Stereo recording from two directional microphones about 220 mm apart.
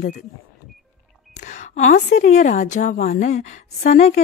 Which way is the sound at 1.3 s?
35° left (ahead or behind).